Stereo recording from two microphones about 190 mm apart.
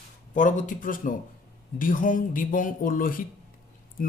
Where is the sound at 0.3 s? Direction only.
40° left (ahead or behind).